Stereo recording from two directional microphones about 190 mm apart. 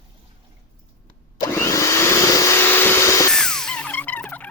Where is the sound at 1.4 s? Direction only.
15° left (ahead or behind).